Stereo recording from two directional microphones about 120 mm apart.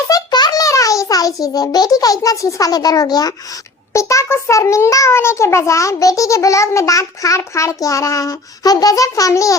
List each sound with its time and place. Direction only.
0.1 s a child's voice: 35° left (ahead or behind)